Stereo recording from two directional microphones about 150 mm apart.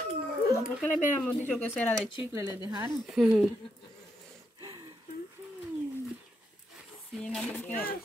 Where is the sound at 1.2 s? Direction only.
10° left (ahead or behind).